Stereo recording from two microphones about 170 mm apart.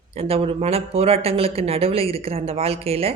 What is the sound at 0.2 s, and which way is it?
A woman's voice, 35° right (ahead or behind).